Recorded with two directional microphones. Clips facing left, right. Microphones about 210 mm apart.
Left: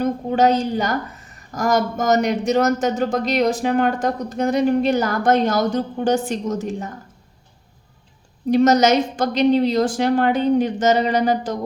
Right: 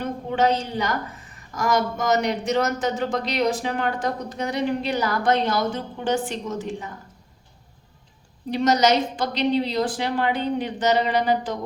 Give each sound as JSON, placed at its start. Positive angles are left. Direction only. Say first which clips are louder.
{"t": 0.0, "sound": "a woman's voice", "louder": "left 5 dB", "side_deg": 40}
{"t": 8.4, "sound": "a woman's voice", "louder": "left 5 dB", "side_deg": 45}